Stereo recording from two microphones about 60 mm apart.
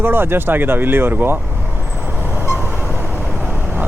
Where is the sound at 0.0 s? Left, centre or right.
Right.